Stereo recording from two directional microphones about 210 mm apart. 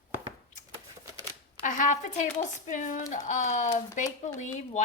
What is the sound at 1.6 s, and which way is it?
Speech, 35° left (ahead or behind).